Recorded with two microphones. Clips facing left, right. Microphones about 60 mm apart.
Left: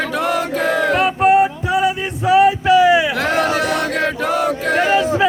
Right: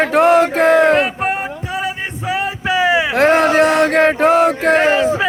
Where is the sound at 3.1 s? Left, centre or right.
Right.